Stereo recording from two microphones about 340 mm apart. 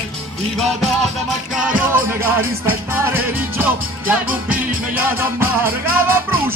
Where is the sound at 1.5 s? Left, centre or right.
Centre.